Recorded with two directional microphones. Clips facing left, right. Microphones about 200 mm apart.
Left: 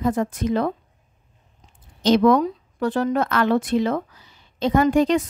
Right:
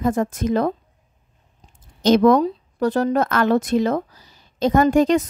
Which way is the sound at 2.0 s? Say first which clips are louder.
Right 2 dB; 45° right (ahead or behind).